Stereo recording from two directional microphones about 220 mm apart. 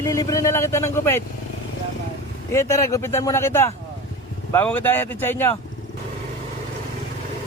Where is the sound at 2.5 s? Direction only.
15° left (ahead or behind).